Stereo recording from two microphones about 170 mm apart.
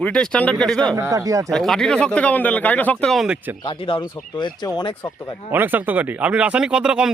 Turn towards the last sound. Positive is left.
turn(degrees=-5)  # may be behind; listen again after turning